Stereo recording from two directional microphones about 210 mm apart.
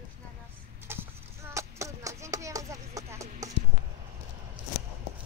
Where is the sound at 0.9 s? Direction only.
10° right (ahead or behind).